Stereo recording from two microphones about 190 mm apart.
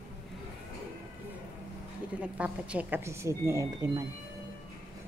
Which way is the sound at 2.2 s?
5° right (ahead or behind).